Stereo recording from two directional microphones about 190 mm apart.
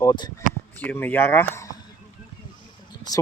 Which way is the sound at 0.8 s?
10° left (ahead or behind).